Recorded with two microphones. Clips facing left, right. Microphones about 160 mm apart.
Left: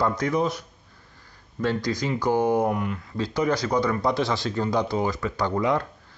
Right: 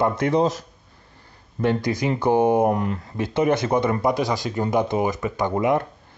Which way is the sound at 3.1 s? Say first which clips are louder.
Right 4 dB; 20° right (ahead or behind).